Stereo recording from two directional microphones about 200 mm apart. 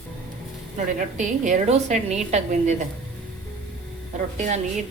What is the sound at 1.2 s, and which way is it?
A woman's voice, 35° right (ahead or behind).